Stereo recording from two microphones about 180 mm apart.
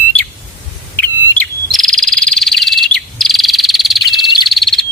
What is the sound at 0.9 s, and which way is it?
Frog, 10° left (ahead or behind).